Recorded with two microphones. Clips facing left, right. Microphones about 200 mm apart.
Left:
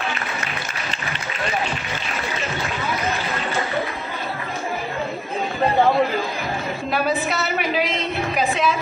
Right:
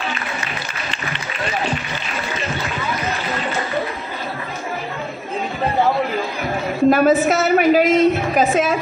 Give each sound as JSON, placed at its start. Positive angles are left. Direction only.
{"t": 6.9, "sound": "a woman's voice", "side_deg": -45}